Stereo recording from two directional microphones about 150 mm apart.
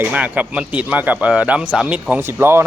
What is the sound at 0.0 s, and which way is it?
Speech, 10° right (ahead or behind).